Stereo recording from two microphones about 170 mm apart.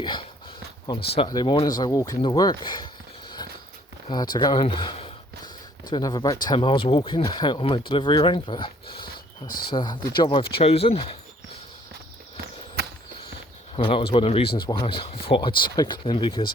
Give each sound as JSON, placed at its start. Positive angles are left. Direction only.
{"t": 0.0, "sound": "speech", "side_deg": 25}
{"t": 9.5, "sound": "speech", "side_deg": 60}
{"t": 9.7, "sound": "speech", "side_deg": 25}
{"t": 13.7, "sound": "speech", "side_deg": 30}